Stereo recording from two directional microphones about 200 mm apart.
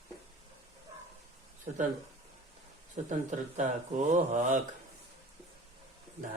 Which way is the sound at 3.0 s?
35° right (ahead or behind).